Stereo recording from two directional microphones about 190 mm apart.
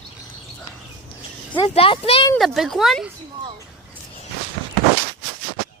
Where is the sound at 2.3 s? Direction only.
Centre (ahead or behind).